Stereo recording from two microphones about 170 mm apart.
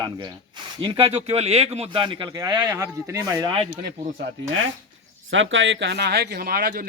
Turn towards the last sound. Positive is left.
turn(degrees=-60)  # may be behind; listen again after turning